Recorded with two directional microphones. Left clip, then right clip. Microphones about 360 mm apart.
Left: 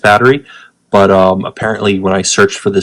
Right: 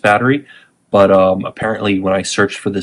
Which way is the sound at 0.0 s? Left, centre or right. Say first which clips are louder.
Left 5 dB; centre.